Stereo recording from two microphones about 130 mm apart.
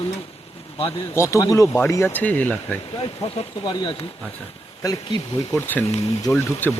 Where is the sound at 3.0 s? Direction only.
40° left (ahead or behind).